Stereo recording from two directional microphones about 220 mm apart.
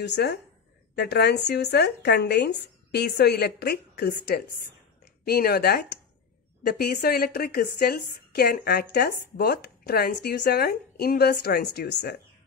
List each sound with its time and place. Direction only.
0.0 s a woman's voice: 50° left (ahead or behind)